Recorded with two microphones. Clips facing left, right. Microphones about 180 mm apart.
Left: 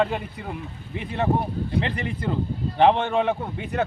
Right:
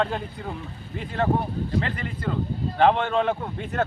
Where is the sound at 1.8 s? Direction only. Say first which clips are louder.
Left 2 dB; 20° left (ahead or behind).